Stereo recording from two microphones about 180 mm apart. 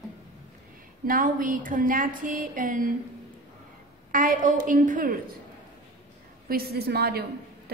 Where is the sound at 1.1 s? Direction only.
50° right (ahead or behind).